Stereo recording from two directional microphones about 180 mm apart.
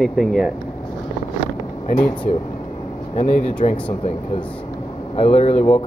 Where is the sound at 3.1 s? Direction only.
40° left (ahead or behind).